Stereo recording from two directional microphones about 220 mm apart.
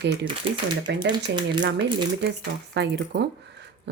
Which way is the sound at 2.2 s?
50° right (ahead or behind).